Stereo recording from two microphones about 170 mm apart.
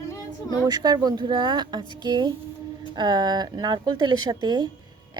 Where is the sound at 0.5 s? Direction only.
25° right (ahead or behind).